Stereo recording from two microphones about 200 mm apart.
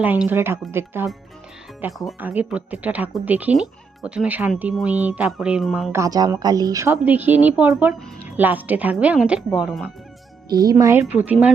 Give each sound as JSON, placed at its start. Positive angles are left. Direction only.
{"t": 0.0, "sound": "speech", "side_deg": -10}
{"t": 1.8, "sound": "speech", "side_deg": 0}
{"t": 5.9, "sound": "speech", "side_deg": -15}
{"t": 10.5, "sound": "speech", "side_deg": -20}